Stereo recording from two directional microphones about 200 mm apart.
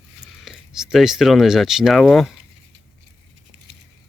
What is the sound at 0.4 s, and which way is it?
Speech, 5° right (ahead or behind).